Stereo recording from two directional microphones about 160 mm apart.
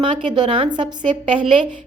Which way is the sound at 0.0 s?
35° right (ahead or behind).